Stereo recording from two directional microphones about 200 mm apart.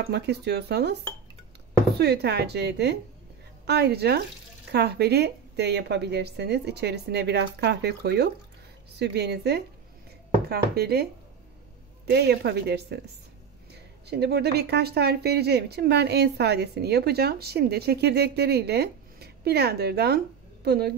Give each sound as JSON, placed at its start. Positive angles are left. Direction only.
{"t": 0.0, "sound": "speech", "side_deg": -55}
{"t": 2.0, "sound": "speech", "side_deg": -55}
{"t": 12.1, "sound": "speech", "side_deg": -55}
{"t": 14.0, "sound": "speech", "side_deg": -55}